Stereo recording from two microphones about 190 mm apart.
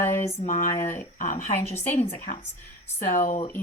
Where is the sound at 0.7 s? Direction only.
15° left (ahead or behind).